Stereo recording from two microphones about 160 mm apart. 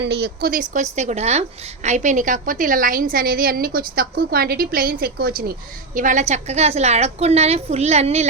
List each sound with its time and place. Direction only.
0.0 s a woman's voice: 90° right; by 8.3 s 40° right (ahead or behind)